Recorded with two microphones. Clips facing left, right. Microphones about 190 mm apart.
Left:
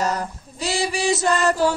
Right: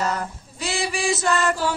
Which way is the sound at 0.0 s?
40° left (ahead or behind).